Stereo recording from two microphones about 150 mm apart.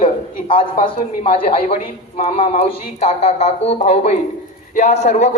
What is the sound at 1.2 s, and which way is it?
A woman's voice, 40° left (ahead or behind).